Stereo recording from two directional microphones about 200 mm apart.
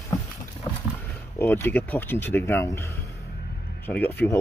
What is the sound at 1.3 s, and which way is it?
Speech, 10° left (ahead or behind).